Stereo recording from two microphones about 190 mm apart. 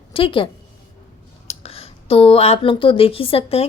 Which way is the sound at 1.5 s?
35° left (ahead or behind).